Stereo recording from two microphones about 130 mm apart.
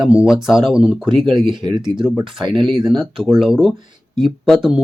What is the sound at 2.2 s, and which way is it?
Speech, 40° right (ahead or behind).